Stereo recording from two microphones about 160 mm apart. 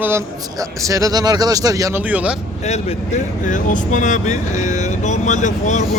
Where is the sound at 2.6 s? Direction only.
45° left (ahead or behind).